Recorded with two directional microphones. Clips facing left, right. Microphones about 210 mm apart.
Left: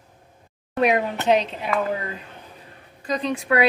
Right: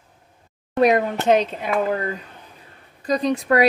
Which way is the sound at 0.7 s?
40° right (ahead or behind).